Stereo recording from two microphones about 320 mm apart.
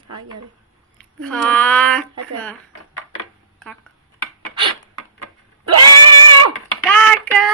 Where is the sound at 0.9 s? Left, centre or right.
Centre.